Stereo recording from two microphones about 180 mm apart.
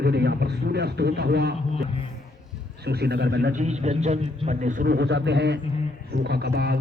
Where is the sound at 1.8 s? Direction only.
30° left (ahead or behind).